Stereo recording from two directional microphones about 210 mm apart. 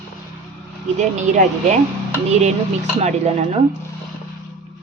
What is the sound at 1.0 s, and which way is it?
Speech, 35° right (ahead or behind).